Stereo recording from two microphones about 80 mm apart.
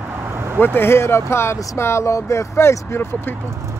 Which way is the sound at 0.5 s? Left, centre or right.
Left.